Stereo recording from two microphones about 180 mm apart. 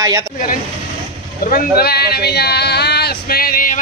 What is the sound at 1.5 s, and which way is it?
Speech, 60° left (ahead or behind).